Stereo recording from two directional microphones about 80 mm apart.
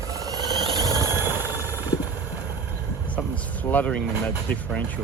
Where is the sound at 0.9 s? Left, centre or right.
Left.